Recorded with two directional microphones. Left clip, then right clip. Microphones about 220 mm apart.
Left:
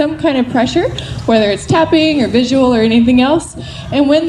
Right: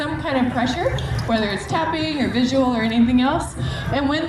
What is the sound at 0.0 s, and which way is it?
A woman's voice, 50° left (ahead or behind).